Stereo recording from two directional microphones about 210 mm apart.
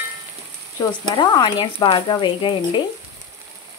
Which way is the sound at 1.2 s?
20° left (ahead or behind).